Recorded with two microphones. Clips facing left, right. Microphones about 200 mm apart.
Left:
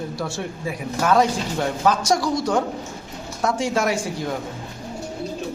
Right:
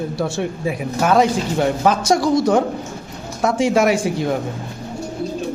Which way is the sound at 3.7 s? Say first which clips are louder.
Right 8 dB; 65° right (ahead or behind).